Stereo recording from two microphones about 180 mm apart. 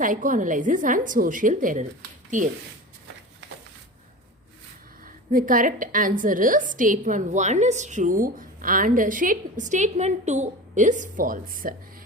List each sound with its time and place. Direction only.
0.0 s a woman's voice: 45° right (ahead or behind)
5.0 s a woman's voice: 50° right (ahead or behind)